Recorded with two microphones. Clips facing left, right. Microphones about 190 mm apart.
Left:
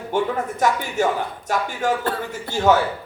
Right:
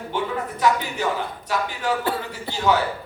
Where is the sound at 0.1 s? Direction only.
45° left (ahead or behind).